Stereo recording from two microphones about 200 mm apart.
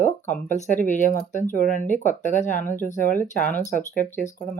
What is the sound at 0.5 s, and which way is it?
Speech, 40° left (ahead or behind).